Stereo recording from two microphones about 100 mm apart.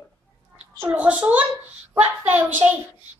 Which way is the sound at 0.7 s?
15° right (ahead or behind).